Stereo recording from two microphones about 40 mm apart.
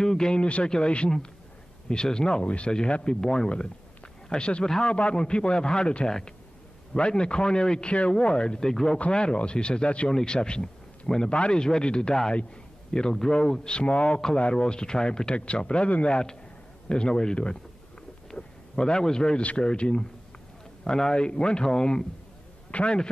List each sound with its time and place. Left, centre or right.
0.0 s a man's voice: centre
2.4 s a man's voice: left
2.7 s a man's voice: left
9.1 s a man's voice: left
22.7 s a man's voice: left